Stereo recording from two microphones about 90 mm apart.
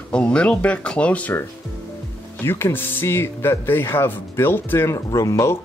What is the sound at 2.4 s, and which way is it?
Speech, 25° left (ahead or behind).